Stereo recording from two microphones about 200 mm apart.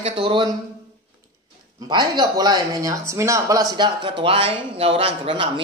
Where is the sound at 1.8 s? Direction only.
20° right (ahead or behind).